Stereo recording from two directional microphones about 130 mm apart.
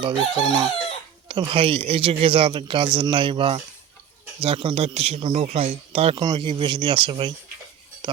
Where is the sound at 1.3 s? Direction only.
40° right (ahead or behind).